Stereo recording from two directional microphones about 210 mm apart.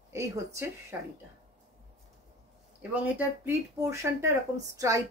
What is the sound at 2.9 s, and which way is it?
A woman's voice, 10° right (ahead or behind).